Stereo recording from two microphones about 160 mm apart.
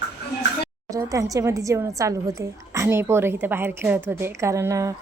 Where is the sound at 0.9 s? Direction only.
20° right (ahead or behind).